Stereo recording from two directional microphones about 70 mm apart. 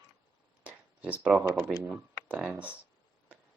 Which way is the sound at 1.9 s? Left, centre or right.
Centre.